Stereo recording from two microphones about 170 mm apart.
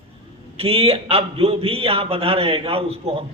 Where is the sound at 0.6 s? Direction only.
35° right (ahead or behind).